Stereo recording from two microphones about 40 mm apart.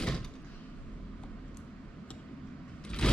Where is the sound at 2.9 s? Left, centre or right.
Left.